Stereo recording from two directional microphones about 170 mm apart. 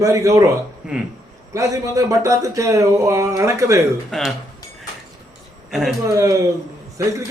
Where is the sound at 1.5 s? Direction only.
20° right (ahead or behind).